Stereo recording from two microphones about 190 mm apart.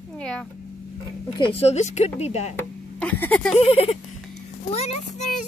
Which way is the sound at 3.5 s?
30° left (ahead or behind).